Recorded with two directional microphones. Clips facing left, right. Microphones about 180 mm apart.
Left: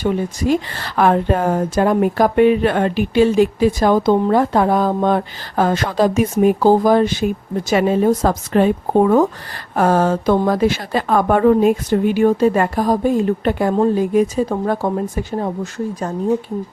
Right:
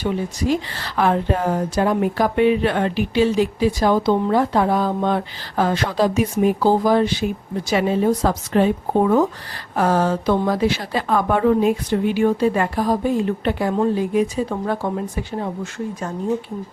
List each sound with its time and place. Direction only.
0.0 s speech: 50° left (ahead or behind)